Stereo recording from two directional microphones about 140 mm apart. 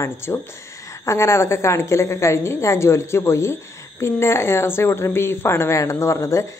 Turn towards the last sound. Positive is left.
turn(degrees=20)  # may be behind; listen again after turning